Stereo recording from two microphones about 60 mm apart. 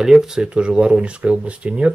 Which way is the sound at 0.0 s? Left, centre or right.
Centre.